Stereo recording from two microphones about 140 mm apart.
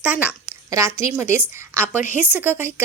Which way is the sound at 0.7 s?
20° right (ahead or behind).